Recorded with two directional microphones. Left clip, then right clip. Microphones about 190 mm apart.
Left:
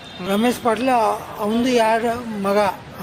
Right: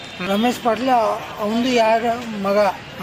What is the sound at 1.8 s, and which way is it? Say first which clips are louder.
Speech: right 3 dB; 25° left (ahead or behind).